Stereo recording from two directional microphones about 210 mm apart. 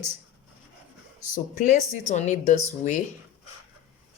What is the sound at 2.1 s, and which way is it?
Speech, 35° left (ahead or behind).